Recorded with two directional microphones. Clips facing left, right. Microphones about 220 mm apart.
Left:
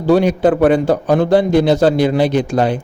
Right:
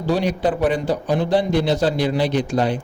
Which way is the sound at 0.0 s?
55° left (ahead or behind).